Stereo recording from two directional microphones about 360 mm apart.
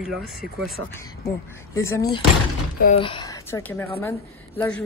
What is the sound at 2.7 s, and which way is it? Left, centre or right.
A woman's voice, centre.